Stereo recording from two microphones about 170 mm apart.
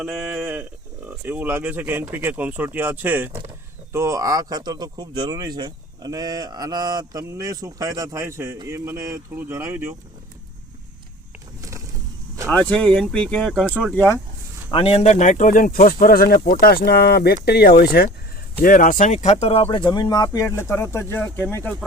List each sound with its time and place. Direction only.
0.0 s speech: 5° right (ahead or behind)
12.5 s speech: 5° left (ahead or behind)
14.7 s speech: 35° left (ahead or behind); by 18.1 s 65° left (ahead or behind)
18.6 s speech: 55° left (ahead or behind); by 21.8 s 10° left (ahead or behind)